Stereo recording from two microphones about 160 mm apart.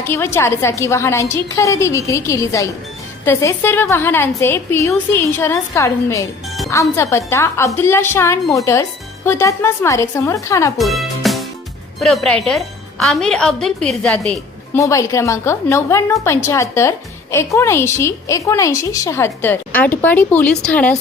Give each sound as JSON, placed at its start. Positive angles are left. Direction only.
{"t": 0.1, "sound": "a woman's voice", "side_deg": 15}
{"t": 10.8, "sound": "music", "side_deg": 0}
{"t": 11.9, "sound": "a woman's voice", "side_deg": 0}
{"t": 14.8, "sound": "a woman's voice", "side_deg": 20}